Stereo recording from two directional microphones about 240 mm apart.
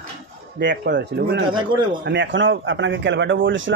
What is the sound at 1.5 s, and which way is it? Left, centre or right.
Speech, centre.